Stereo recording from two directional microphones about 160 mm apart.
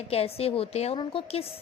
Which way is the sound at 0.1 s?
40° left (ahead or behind).